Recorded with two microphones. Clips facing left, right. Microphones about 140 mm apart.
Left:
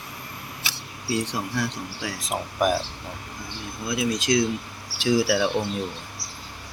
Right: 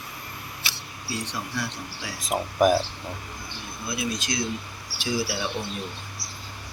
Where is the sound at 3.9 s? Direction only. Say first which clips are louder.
Left 6 dB; 90° left.